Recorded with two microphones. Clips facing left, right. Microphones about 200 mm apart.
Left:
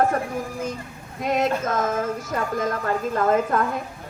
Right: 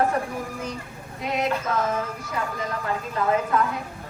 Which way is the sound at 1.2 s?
45° left (ahead or behind).